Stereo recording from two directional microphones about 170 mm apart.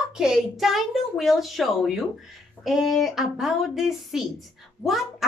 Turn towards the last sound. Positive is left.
turn(degrees=0)  # may be behind; listen again after turning